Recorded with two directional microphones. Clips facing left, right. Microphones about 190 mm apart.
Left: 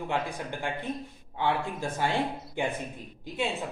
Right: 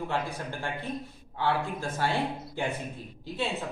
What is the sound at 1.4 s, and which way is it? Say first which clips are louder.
Speech: even; 15° left (ahead or behind).